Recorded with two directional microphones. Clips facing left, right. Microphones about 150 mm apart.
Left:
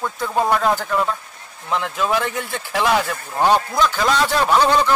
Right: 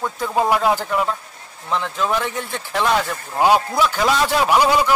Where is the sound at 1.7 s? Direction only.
10° left (ahead or behind).